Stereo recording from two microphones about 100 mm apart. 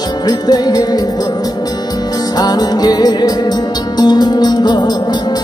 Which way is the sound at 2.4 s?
40° left (ahead or behind).